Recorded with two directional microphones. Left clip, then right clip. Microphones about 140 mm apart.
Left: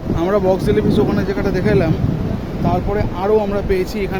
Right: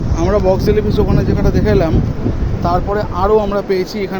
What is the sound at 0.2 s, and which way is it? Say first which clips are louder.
Speech: right 2 dB; centre (ahead or behind).